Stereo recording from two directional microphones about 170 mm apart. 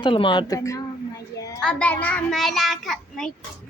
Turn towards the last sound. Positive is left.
turn(degrees=0)  # may be behind; listen again after turning